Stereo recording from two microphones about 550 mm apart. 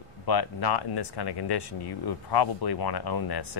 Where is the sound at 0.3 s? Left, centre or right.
Left.